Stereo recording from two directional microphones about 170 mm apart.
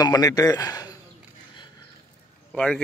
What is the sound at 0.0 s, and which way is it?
Speech, 20° left (ahead or behind).